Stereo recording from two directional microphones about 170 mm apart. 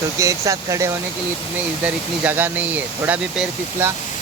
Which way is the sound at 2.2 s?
10° right (ahead or behind).